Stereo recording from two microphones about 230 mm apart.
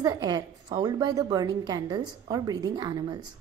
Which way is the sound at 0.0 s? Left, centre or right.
Centre.